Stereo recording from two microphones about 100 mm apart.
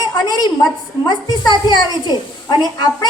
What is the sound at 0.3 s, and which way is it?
A woman's voice, 40° left (ahead or behind).